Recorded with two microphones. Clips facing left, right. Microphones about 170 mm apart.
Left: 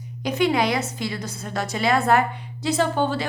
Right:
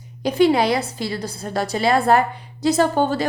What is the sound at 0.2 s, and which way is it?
A woman's voice, 35° right (ahead or behind).